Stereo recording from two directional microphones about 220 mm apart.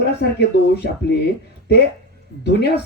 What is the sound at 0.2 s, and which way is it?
Speech, 50° left (ahead or behind).